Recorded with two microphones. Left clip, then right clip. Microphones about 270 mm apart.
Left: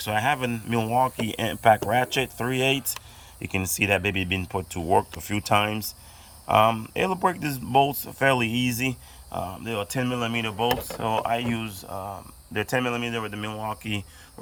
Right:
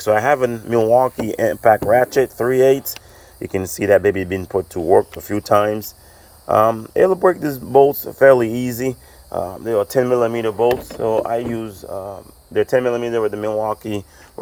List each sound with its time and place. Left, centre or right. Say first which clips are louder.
0.0 s speech: right 9 dB; centre
3.8 s speech: right 11 dB; centre
5.4 s speech: right 8 dB; centre
8.9 s speech: right 9 dB; centre